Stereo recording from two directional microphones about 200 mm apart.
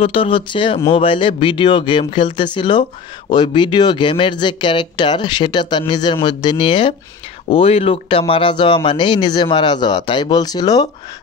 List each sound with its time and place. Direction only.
0.0 s speech: 25° left (ahead or behind)